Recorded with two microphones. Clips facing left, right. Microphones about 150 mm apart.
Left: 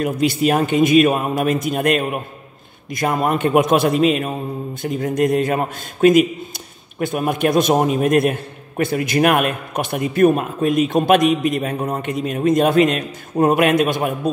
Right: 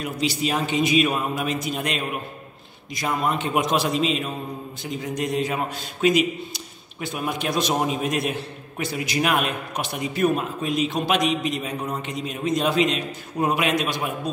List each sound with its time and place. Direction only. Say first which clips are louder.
0.0 s a man's voice: left 8 dB; 50° left (ahead or behind)